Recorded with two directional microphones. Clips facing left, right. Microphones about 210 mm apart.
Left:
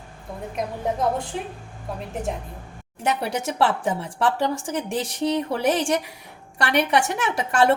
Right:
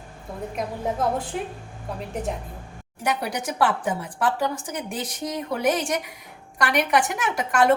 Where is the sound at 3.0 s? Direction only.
25° left (ahead or behind).